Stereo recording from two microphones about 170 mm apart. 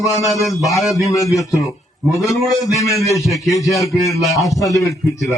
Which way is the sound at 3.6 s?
Centre (ahead or behind).